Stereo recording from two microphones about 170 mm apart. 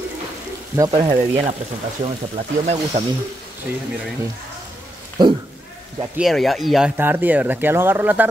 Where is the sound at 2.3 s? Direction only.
40° right (ahead or behind).